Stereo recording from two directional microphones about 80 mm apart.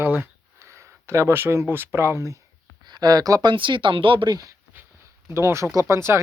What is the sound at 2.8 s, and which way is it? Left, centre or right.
Speech, right.